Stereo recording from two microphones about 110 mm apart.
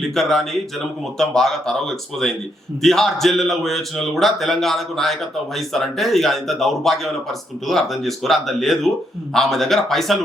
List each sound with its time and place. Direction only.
0.0 s a man's voice: 5° left (ahead or behind)